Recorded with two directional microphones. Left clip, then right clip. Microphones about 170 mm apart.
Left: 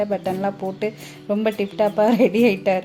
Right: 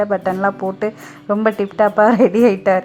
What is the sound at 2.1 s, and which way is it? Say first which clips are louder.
Speech: right 4 dB; 50° right (ahead or behind).